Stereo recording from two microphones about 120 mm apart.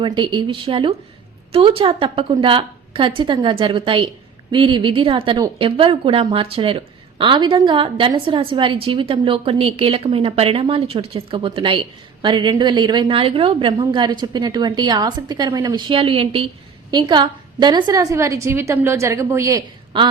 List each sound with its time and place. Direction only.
0.0 s a woman's voice: 40° right (ahead or behind)
15.9 s a woman's voice: 50° right (ahead or behind)
16.9 s a woman's voice: 35° right (ahead or behind)
19.9 s a woman's voice: 40° right (ahead or behind)